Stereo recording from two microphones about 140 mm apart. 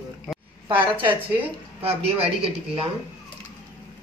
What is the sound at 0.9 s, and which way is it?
Speech, 10° right (ahead or behind).